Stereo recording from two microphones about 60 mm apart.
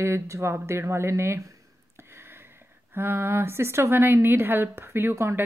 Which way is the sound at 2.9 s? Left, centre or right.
Right.